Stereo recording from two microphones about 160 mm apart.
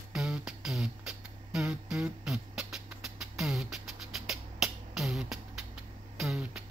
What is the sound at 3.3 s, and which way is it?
Beatboxing, centre (ahead or behind).